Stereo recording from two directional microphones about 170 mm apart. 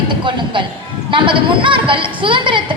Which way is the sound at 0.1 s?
30° right (ahead or behind).